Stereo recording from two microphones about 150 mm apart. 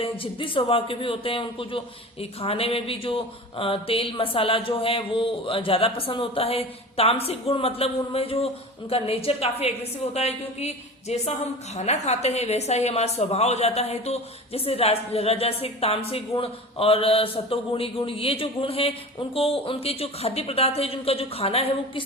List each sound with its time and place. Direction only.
0.0 s a man's voice: 35° left (ahead or behind)